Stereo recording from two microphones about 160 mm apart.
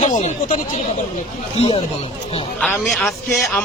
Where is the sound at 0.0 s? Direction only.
45° left (ahead or behind).